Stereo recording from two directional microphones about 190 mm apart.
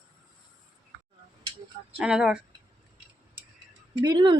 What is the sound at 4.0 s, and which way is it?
Speech, 25° right (ahead or behind).